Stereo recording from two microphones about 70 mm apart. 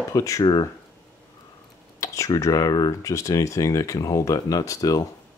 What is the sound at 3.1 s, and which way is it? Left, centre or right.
Speech, left.